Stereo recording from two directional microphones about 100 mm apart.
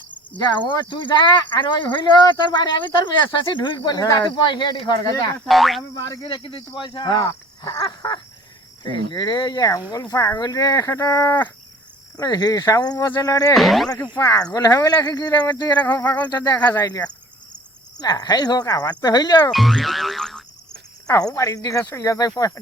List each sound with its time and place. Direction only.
0.7 s speech: 50° left (ahead or behind)
3.8 s speech: 45° left (ahead or behind)
5.5 s speech: centre (ahead or behind)
5.9 s speech: 35° left (ahead or behind)
6.2 s speech: 55° left (ahead or behind); by 10.8 s 40° left (ahead or behind)
10.8 s speech: 30° left (ahead or behind)
12.1 s speech: 40° left (ahead or behind)
13.6 s speech: centre (ahead or behind)
14.2 s speech: 35° left (ahead or behind)
15.8 s speech: 20° left (ahead or behind)
16.3 s speech: 45° left (ahead or behind)
19.5 s music: centre (ahead or behind)
21.3 s speech: 35° left (ahead or behind)